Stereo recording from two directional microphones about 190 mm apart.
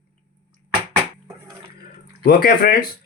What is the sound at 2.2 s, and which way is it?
Speech, 50° left (ahead or behind).